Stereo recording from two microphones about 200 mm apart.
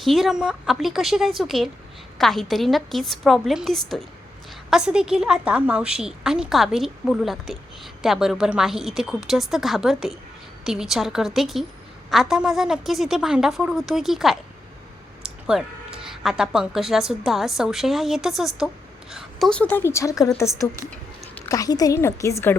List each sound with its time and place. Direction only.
0.0 s a woman's voice: centre (ahead or behind)